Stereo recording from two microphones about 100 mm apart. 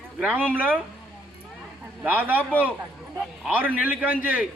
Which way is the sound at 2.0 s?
15° right (ahead or behind).